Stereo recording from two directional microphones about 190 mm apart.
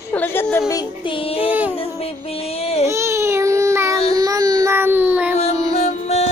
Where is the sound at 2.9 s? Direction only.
15° right (ahead or behind).